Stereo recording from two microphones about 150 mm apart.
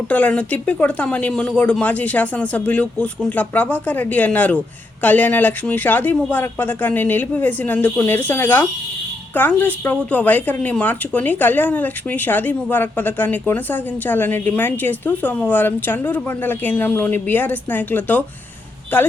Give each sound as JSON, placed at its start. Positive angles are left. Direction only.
{"t": 0.1, "sound": "a woman's voice", "side_deg": 10}